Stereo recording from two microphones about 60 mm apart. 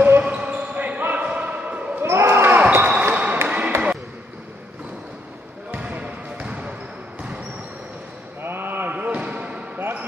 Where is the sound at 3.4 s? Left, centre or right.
Right.